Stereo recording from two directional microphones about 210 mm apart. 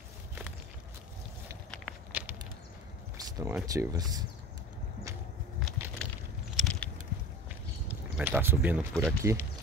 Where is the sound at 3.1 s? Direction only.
15° right (ahead or behind).